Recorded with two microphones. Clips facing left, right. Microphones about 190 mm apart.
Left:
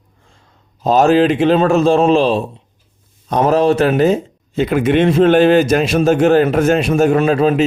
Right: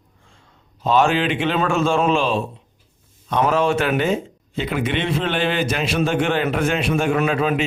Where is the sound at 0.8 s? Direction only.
40° left (ahead or behind).